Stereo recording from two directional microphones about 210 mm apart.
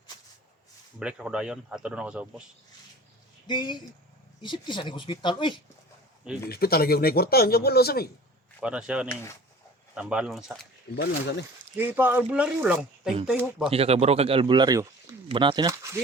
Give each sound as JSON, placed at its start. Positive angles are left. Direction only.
{"t": 0.9, "sound": "speech", "side_deg": -5}
{"t": 3.4, "sound": "speech", "side_deg": 20}
{"t": 6.5, "sound": "speech", "side_deg": 45}
{"t": 8.6, "sound": "speech", "side_deg": -5}
{"t": 10.9, "sound": "speech", "side_deg": 55}
{"t": 11.8, "sound": "speech", "side_deg": -10}
{"t": 13.7, "sound": "speech", "side_deg": -30}